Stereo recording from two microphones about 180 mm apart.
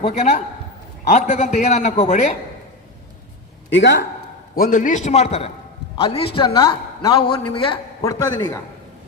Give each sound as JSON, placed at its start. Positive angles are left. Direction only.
{"t": 0.0, "sound": "a man's voice", "side_deg": 40}
{"t": 3.7, "sound": "speech", "side_deg": 85}
{"t": 4.5, "sound": "a man's voice", "side_deg": 50}
{"t": 8.0, "sound": "a man's voice", "side_deg": 20}